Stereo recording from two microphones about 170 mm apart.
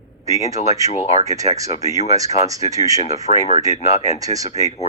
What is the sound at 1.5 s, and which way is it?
Speech, 20° right (ahead or behind).